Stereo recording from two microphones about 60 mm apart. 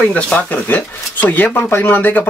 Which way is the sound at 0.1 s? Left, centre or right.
Left.